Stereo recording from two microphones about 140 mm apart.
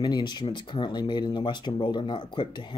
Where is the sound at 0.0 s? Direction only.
30° left (ahead or behind).